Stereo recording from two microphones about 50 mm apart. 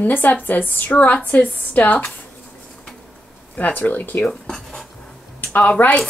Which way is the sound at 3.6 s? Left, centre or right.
Left.